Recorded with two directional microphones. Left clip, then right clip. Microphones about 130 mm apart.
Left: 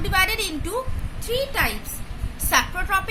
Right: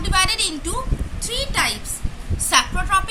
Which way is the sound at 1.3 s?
85° left.